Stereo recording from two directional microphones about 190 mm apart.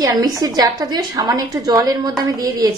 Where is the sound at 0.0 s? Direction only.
20° right (ahead or behind).